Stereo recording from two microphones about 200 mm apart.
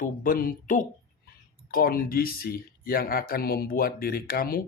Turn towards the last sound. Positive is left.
turn(degrees=45)  # may be behind; listen again after turning